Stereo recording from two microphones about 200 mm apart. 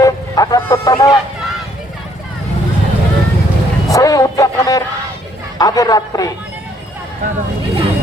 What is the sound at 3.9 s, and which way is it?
Vehicle, 15° left (ahead or behind).